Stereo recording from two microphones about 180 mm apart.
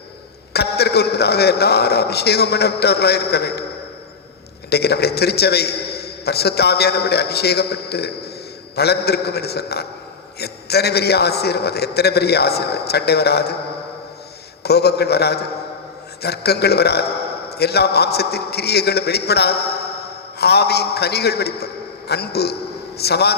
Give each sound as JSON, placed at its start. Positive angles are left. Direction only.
{"t": 0.5, "sound": "a man's voice", "side_deg": 65}
{"t": 4.7, "sound": "a man's voice", "side_deg": 65}
{"t": 14.6, "sound": "a man's voice", "side_deg": 65}